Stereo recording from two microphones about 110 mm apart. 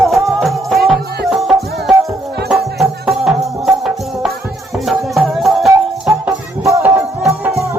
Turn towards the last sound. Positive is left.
turn(degrees=-30)  # may be behind; listen again after turning